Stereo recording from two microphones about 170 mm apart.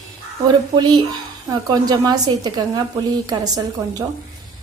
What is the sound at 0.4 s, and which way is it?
Speech, 25° right (ahead or behind).